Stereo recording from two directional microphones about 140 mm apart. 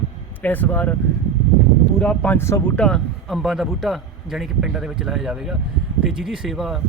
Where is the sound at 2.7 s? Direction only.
5° left (ahead or behind).